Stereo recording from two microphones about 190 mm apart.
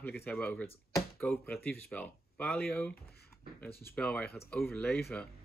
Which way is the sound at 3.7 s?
55° left (ahead or behind).